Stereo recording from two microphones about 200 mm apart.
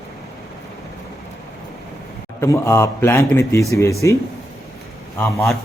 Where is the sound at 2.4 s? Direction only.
15° left (ahead or behind).